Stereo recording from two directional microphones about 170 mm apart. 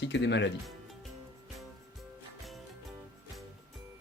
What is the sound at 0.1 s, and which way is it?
Speech, 90° left.